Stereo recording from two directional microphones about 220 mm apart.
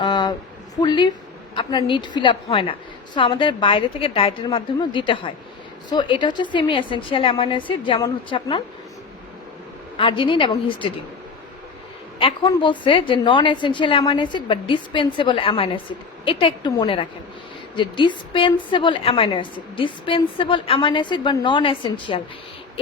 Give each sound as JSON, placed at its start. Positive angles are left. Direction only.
{"t": 0.0, "sound": "a sound", "side_deg": 20}
{"t": 0.8, "sound": "a woman's voice", "side_deg": 20}
{"t": 10.0, "sound": "a woman's voice", "side_deg": 20}
{"t": 12.2, "sound": "a woman's voice", "side_deg": 25}